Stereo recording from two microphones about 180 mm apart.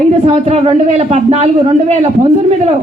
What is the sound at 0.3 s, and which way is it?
A woman's voice, 35° right (ahead or behind).